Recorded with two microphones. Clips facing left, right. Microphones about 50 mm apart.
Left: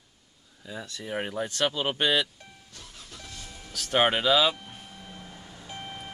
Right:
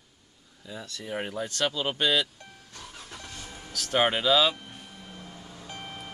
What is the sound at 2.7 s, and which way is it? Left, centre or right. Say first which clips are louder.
Vehicle: right 5 dB; right.